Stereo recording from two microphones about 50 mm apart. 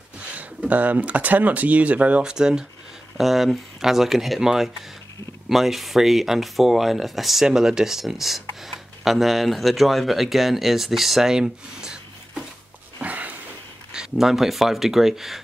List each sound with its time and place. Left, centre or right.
0.7 s speech: right
2.2 s speech: centre
3.2 s speech: centre
13.0 s a sound: right
13.9 s speech: centre